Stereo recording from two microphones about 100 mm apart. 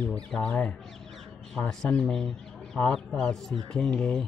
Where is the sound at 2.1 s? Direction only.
5° left (ahead or behind).